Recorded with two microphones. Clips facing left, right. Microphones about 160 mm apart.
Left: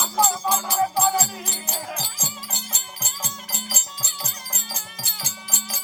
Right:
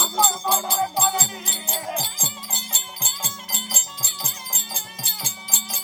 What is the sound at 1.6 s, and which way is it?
Music, 25° right (ahead or behind).